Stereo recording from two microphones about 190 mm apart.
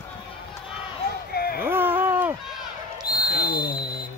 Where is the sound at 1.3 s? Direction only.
55° left (ahead or behind).